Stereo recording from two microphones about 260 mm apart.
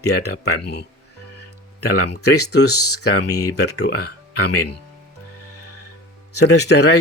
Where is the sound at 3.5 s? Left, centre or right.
Left.